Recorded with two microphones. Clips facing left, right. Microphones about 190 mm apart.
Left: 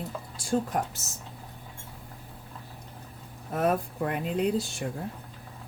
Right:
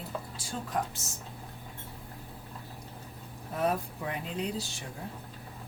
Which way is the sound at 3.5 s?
55° left (ahead or behind).